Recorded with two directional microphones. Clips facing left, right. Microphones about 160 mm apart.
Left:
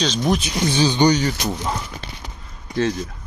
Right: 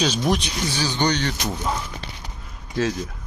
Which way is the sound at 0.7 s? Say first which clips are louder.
Left 7 dB; 20° left (ahead or behind).